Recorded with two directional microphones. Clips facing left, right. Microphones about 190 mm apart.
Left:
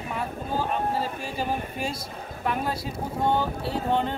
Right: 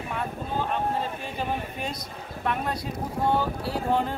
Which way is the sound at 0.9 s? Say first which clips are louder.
Left 1 dB; 10° left (ahead or behind).